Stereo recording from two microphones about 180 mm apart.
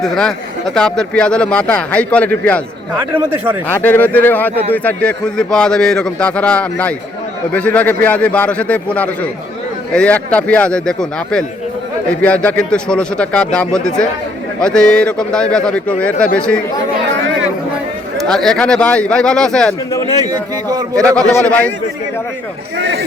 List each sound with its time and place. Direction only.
0.0 s speech: centre (ahead or behind)
3.0 s speech: 10° right (ahead or behind)
3.8 s speech: 10° left (ahead or behind)
18.2 s speech: 5° left (ahead or behind)
20.2 s a man's voice: 20° right (ahead or behind)
21.3 s speech: 10° left (ahead or behind)
22.8 s speech: 75° right (ahead or behind)